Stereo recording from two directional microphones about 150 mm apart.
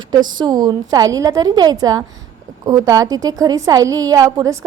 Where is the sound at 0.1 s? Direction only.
30° right (ahead or behind).